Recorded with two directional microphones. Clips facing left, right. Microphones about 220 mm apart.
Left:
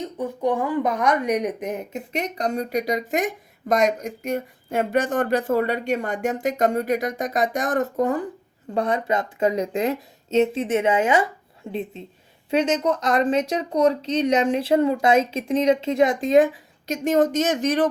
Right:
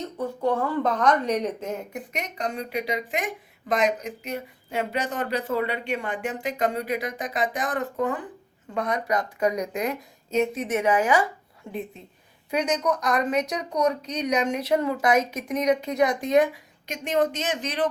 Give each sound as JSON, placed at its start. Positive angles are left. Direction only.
{"t": 0.0, "sound": "a woman's voice", "side_deg": 15}
{"t": 16.8, "sound": "speech", "side_deg": 40}